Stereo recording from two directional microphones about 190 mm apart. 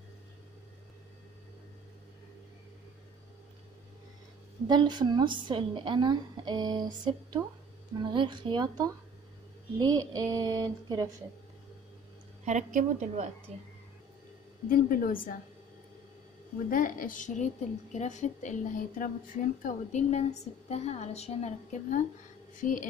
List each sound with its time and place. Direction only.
4.6 s a woman's voice: 25° right (ahead or behind)
12.4 s a woman's voice: 40° right (ahead or behind)
14.7 s a woman's voice: 50° left (ahead or behind)
16.7 s a woman's voice: 45° left (ahead or behind)